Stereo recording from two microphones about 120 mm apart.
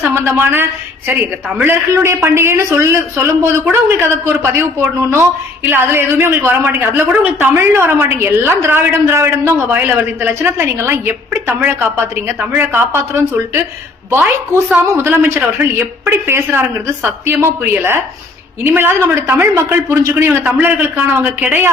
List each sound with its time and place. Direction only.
0.0 s a woman's voice: 20° right (ahead or behind)
14.7 s a woman's voice: 15° right (ahead or behind)